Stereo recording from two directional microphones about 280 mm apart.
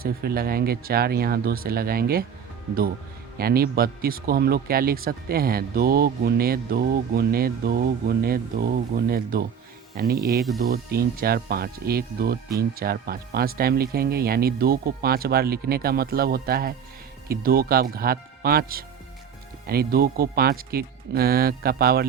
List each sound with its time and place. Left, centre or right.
0.0 s speech: right
3.3 s speech: right
10.6 s speech: right